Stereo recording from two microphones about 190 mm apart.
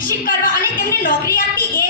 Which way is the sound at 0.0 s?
50° left (ahead or behind).